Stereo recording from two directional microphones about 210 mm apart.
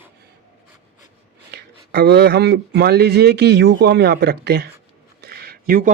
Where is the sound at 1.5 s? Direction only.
50° right (ahead or behind).